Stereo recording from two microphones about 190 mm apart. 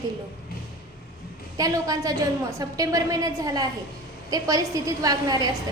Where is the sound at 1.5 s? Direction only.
20° right (ahead or behind).